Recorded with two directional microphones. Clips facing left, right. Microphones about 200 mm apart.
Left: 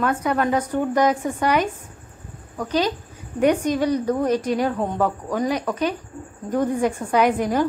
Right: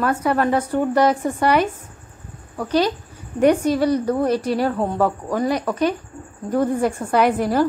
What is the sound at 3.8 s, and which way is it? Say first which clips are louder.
Speech: right 1 dB; 10° left (ahead or behind).